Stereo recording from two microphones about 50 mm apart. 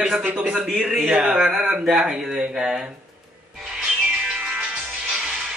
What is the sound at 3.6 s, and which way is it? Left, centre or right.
Music, centre.